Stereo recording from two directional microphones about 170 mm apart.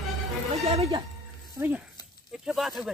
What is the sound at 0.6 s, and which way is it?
Speech, 35° right (ahead or behind).